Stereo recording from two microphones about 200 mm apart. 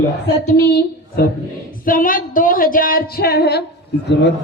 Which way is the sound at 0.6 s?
50° left (ahead or behind).